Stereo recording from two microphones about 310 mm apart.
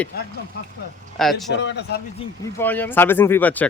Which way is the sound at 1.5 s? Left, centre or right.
Left.